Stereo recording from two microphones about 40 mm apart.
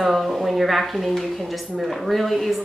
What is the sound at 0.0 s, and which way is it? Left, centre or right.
A woman's voice, centre.